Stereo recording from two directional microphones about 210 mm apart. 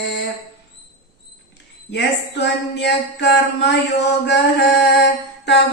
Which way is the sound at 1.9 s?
55° left (ahead or behind).